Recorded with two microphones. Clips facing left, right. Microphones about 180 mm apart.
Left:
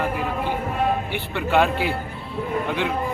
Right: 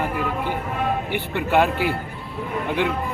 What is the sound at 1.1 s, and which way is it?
Speech, 15° right (ahead or behind).